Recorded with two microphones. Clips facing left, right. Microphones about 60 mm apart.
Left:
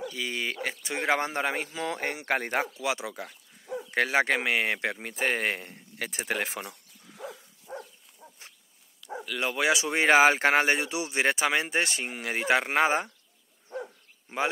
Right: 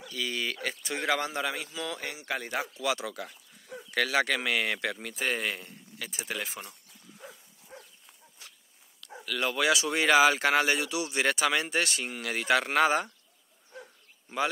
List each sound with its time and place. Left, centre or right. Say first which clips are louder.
0.1 s speech: left 1 dB; left
2.8 s speech: even; left
8.4 s a sound: right 2 dB; left
9.0 s speech: even; centre; by 13.1 s left